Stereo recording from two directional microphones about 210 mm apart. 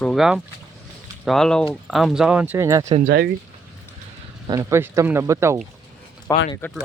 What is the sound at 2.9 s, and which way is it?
Speech, 35° right (ahead or behind).